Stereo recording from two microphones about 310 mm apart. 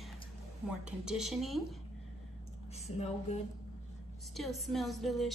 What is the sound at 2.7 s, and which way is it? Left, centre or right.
Speech, left.